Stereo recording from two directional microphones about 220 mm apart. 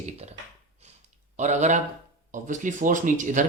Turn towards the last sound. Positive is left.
turn(degrees=-35)  # may be behind; listen again after turning